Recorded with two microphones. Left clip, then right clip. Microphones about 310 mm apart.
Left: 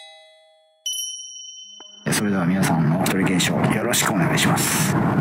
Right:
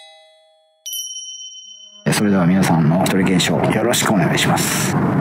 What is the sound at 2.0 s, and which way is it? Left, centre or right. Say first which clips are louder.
Speech: right 5 dB; right.